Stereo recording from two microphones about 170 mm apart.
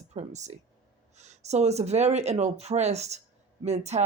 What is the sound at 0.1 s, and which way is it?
Speech, 45° right (ahead or behind).